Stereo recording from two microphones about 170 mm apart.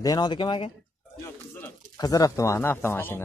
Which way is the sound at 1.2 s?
15° left (ahead or behind).